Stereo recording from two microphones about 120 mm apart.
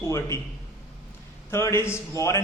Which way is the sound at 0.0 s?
25° left (ahead or behind).